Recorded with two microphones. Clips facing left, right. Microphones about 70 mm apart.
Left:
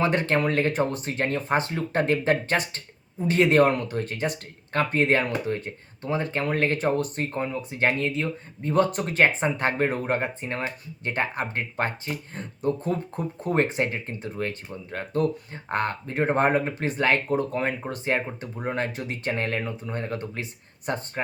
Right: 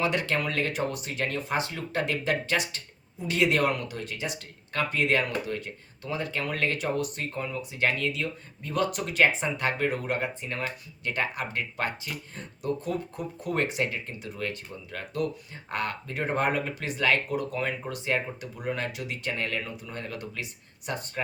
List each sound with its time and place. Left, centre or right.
0.0 s speech: left